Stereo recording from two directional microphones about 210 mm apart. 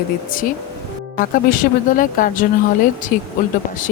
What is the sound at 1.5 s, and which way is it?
Speech, 40° left (ahead or behind).